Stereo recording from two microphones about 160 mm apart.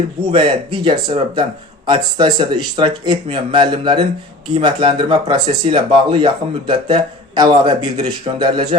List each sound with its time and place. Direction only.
0.3 s speech: 35° right (ahead or behind)